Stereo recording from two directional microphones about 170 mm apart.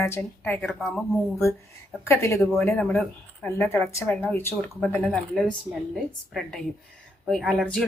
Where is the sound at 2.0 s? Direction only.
15° left (ahead or behind).